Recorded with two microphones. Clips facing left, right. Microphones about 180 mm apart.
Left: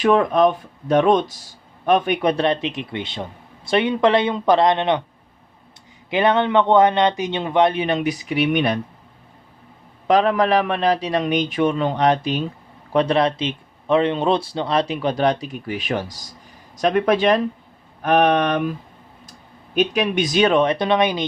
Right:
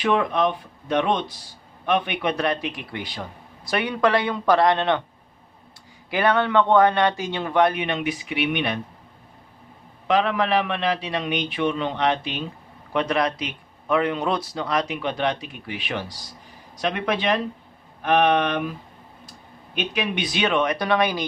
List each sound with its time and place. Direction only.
0.0 s a man's voice: 45° left (ahead or behind); by 5.0 s 20° left (ahead or behind)
6.1 s a man's voice: 20° left (ahead or behind)
7.8 s a man's voice: 40° left (ahead or behind)
10.1 s a man's voice: 40° left (ahead or behind)
19.7 s a man's voice: 45° left (ahead or behind); by 21.2 s 20° left (ahead or behind)